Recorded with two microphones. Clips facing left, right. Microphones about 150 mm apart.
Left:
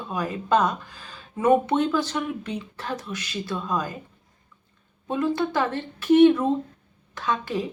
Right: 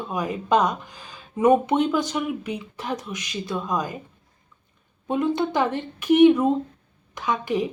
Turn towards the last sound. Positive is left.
turn(degrees=-15)  # may be behind; listen again after turning